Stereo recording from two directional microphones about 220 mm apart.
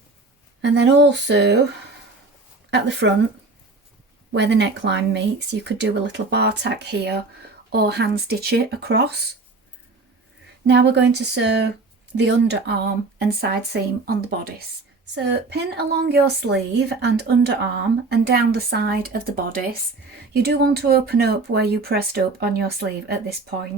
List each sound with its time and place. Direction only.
0.6 s a woman's voice: 55° right (ahead or behind)
2.6 s speech: 55° right (ahead or behind)
4.3 s a woman's voice: 50° right (ahead or behind)
10.7 s a woman's voice: 50° right (ahead or behind)